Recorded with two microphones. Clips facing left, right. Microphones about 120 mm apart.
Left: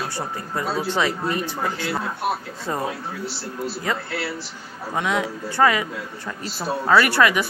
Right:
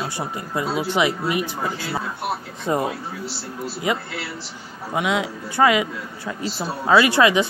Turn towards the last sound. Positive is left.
turn(degrees=-20)  # may be behind; listen again after turning